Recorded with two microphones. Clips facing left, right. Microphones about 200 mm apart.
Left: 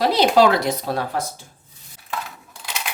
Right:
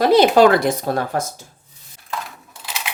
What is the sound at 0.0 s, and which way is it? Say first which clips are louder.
Speech: right 4 dB; 50° right (ahead or behind).